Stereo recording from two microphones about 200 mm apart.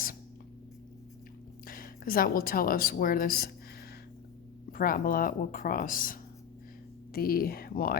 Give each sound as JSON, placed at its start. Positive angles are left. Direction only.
{"t": 1.6, "sound": "a woman's voice", "side_deg": 45}
{"t": 4.7, "sound": "speech", "side_deg": 45}